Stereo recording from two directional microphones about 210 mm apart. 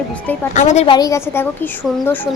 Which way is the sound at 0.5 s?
35° left (ahead or behind).